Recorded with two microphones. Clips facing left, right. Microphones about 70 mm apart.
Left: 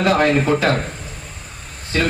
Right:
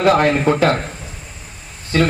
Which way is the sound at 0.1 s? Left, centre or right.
Right.